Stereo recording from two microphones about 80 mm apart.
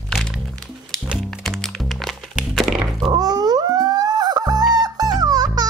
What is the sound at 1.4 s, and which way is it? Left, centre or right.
Music, centre.